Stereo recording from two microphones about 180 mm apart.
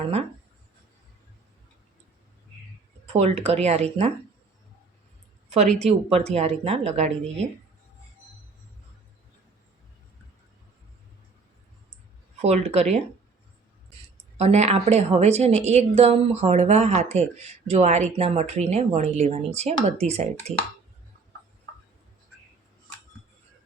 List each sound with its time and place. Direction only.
3.1 s a woman's voice: 35° right (ahead or behind)
5.8 s a woman's voice: 35° right (ahead or behind)
12.4 s a woman's voice: 35° right (ahead or behind)
14.3 s a woman's voice: 35° right (ahead or behind)